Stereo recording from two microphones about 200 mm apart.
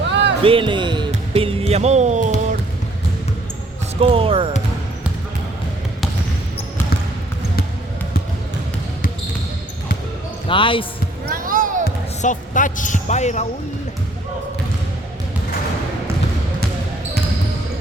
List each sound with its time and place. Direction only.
0.1 s a sound: 60° right (ahead or behind)
0.4 s speech: 25° right (ahead or behind)
4.0 s speech: 25° right (ahead or behind)
10.5 s speech: 25° left (ahead or behind)
11.3 s basketball bounce: 45° right (ahead or behind)
11.9 s basketball bounce: 40° left (ahead or behind)